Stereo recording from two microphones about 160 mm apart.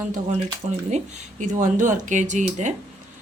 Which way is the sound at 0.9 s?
45° right (ahead or behind).